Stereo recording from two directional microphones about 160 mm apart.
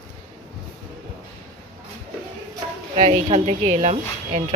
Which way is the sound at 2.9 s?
45° right (ahead or behind).